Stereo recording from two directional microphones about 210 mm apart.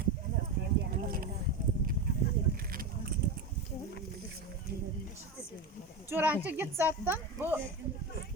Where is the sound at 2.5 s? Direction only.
45° right (ahead or behind).